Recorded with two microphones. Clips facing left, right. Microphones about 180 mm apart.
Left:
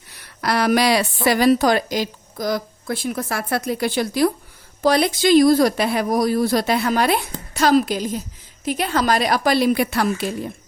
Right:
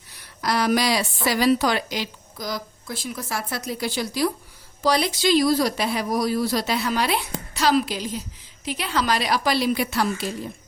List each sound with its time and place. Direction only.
0.2 s a woman's voice: 65° left (ahead or behind)